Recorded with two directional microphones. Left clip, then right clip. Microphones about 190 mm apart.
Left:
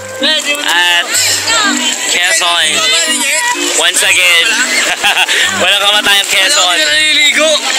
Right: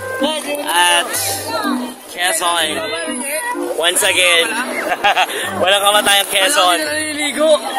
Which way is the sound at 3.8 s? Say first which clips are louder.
Left 4 dB; 10° right (ahead or behind).